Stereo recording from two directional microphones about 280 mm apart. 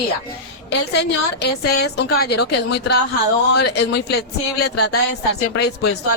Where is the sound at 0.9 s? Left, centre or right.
Left.